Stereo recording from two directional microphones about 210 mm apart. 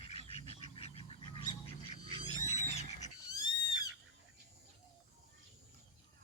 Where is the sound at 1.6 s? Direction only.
25° left (ahead or behind).